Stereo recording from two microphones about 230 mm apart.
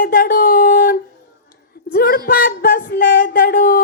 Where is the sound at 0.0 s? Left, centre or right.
Left.